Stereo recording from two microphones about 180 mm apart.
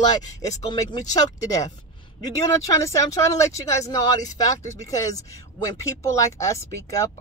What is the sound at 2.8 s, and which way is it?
Speech, 20° left (ahead or behind).